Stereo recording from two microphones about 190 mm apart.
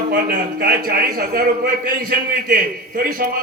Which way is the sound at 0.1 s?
50° right (ahead or behind).